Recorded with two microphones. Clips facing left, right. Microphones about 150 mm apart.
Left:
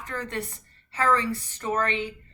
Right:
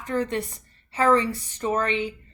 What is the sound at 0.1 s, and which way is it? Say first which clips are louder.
A woman's voice: right 7 dB; 20° right (ahead or behind).